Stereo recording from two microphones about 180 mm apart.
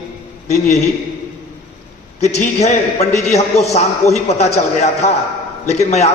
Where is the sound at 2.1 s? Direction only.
40° left (ahead or behind).